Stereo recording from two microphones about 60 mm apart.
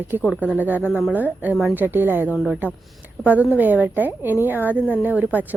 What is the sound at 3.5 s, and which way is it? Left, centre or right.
A woman's voice, right.